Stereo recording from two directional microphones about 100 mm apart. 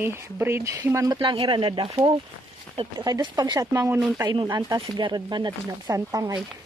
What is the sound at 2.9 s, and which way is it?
Speech, 40° right (ahead or behind).